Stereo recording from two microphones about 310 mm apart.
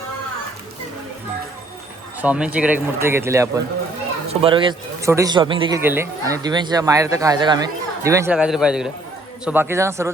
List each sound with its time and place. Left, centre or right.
2.2 s speech: centre